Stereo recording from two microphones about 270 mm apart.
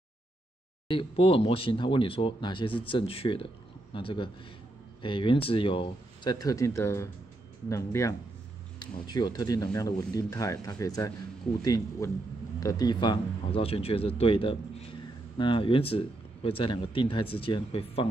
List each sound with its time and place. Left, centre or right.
0.8 s speech: centre